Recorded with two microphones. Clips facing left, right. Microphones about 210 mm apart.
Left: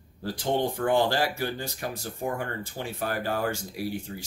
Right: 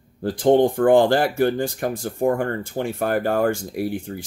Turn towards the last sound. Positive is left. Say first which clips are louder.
# right 7 dB
turn(degrees=-55)  # may be behind; listen again after turning